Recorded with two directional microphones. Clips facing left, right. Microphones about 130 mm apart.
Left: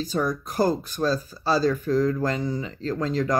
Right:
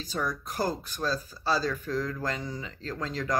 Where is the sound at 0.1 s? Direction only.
40° left (ahead or behind).